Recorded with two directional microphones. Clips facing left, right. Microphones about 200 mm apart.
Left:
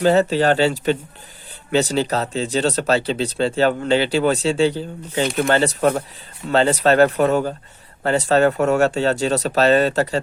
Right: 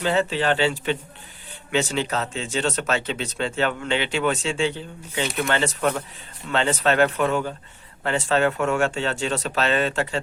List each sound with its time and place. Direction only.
0.0 s speech: 40° left (ahead or behind)